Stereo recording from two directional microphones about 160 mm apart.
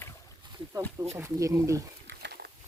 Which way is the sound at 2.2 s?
90° right.